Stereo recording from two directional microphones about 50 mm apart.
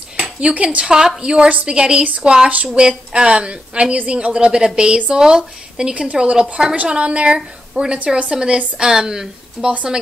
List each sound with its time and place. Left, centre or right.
0.2 s a woman's voice: right